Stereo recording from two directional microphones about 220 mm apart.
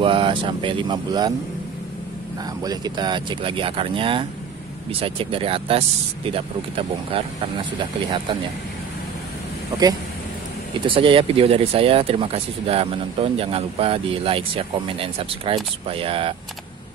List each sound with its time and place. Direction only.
0.0 s speech: 25° right (ahead or behind)
2.6 s speech: 15° right (ahead or behind)
10.7 s speech: 25° right (ahead or behind)